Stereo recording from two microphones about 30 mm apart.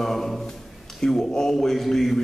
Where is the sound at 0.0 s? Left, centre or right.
Centre.